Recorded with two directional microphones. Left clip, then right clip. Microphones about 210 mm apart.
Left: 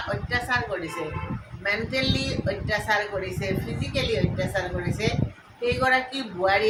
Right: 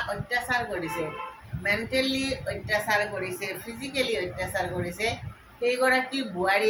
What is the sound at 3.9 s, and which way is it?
A woman's voice, 5° left (ahead or behind).